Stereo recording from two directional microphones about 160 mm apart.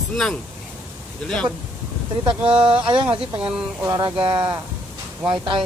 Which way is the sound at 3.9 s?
25° right (ahead or behind).